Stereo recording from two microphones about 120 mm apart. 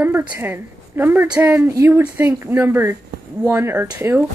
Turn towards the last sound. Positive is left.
turn(degrees=-15)  # may be behind; listen again after turning